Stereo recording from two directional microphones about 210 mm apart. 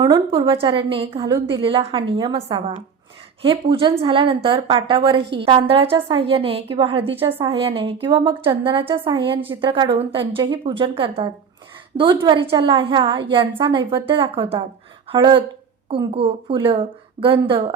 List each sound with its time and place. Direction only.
0.0 s a woman's voice: 20° right (ahead or behind)